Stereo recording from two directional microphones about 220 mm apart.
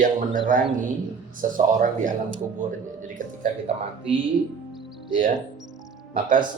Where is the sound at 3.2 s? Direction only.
35° right (ahead or behind).